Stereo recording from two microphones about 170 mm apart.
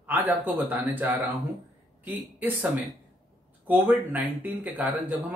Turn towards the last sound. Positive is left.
turn(degrees=-10)  # may be behind; listen again after turning